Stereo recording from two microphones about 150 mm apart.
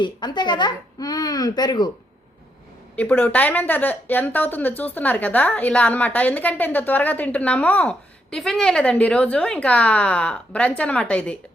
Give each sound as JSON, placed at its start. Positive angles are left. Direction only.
{"t": 0.0, "sound": "speech", "side_deg": 30}
{"t": 2.9, "sound": "a woman's voice", "side_deg": 10}